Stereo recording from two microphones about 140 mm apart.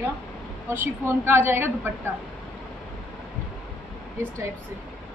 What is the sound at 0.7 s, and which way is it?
Speech, 15° right (ahead or behind).